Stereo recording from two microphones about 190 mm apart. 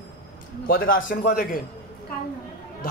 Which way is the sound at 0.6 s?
50° left (ahead or behind).